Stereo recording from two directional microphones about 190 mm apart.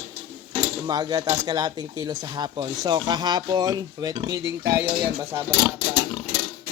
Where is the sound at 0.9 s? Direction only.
20° right (ahead or behind).